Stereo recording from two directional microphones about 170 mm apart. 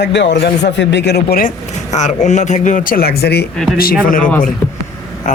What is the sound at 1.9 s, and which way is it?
Speech, 45° left (ahead or behind).